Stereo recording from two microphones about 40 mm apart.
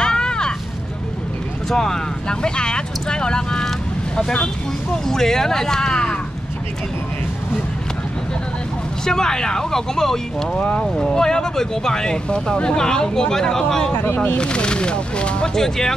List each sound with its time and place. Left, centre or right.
0.0 s a sound: centre
1.7 s speech: centre
4.9 s speech: centre
9.0 s speech: centre
10.6 s speech: left
14.0 s speech: left
14.3 s speech: left
15.5 s speech: centre